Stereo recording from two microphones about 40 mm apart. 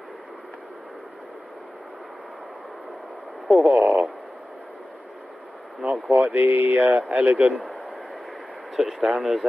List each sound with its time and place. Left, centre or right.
3.4 s speech: centre
3.7 s speech: right
5.8 s speech: right
6.2 s speech: right
8.7 s speech: centre